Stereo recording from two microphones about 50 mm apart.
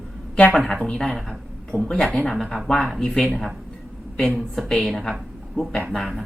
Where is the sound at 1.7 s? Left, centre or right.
Left.